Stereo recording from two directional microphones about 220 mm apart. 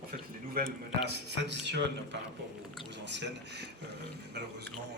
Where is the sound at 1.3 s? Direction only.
50° right (ahead or behind).